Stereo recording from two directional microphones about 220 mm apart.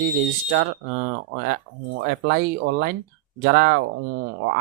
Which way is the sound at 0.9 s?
40° right (ahead or behind).